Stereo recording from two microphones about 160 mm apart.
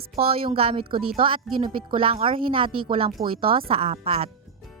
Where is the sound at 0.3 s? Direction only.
35° right (ahead or behind).